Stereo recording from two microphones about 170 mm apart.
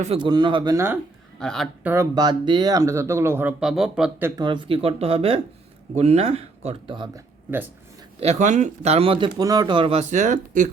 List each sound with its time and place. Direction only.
0.0 s speech: 30° right (ahead or behind)
1.4 s a man's voice: centre (ahead or behind)
1.8 s speech: 15° right (ahead or behind)
4.4 s speech: 25° right (ahead or behind)
8.2 s speech: 40° right (ahead or behind)
9.4 s speech: 25° right (ahead or behind); by 10.7 s 50° right (ahead or behind)